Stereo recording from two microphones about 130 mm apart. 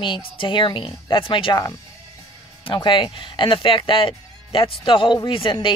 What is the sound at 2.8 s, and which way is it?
Speech, 40° left (ahead or behind).